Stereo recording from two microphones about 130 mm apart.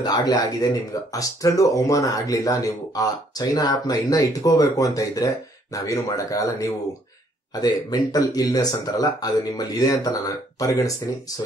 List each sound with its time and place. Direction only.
0.0 s speech: 30° left (ahead or behind)